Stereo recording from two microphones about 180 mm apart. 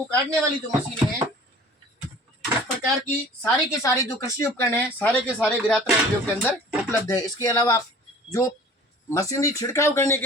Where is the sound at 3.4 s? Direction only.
20° left (ahead or behind).